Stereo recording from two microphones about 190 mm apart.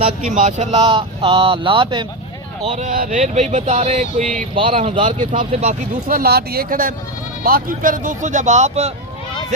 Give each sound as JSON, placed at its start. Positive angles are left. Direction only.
{"t": 0.3, "sound": "speech", "side_deg": -40}
{"t": 2.6, "sound": "speech", "side_deg": -40}
{"t": 5.2, "sound": "speech", "side_deg": -40}
{"t": 6.1, "sound": "speech", "side_deg": -50}